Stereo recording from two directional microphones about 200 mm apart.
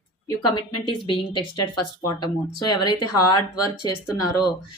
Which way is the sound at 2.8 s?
20° left (ahead or behind).